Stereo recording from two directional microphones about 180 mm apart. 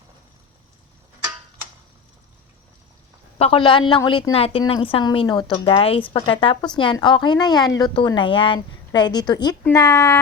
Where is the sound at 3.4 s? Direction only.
30° left (ahead or behind).